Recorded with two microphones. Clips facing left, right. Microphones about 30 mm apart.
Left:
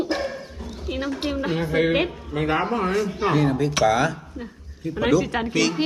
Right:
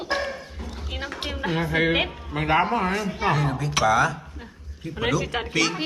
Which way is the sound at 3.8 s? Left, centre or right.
Centre.